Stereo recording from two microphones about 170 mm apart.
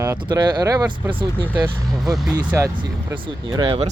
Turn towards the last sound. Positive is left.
turn(degrees=-25)  # may be behind; listen again after turning